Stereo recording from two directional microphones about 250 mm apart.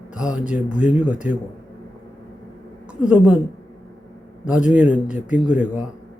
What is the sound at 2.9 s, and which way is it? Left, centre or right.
Speech, centre.